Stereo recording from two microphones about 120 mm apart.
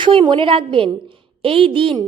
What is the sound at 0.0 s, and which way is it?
A woman's voice, 45° right (ahead or behind).